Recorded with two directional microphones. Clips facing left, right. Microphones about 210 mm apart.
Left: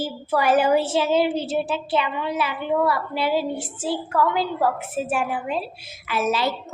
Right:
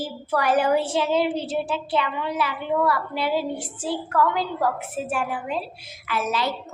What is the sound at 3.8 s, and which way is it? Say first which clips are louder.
A woman's voice: even; 5° left (ahead or behind).